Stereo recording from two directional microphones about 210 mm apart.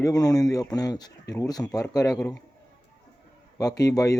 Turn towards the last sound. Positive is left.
turn(degrees=15)  # may be behind; listen again after turning